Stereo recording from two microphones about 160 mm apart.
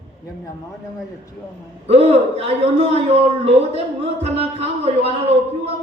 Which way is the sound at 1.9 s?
40° right (ahead or behind).